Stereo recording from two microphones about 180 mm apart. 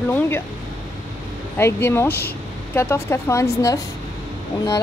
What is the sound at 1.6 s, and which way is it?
A woman's voice, 15° left (ahead or behind).